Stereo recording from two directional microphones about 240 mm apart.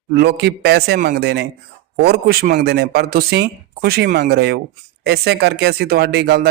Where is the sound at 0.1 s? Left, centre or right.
Right.